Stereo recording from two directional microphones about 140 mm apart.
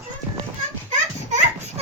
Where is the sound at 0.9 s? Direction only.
55° right (ahead or behind).